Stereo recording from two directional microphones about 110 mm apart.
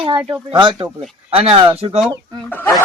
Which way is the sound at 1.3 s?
60° right (ahead or behind).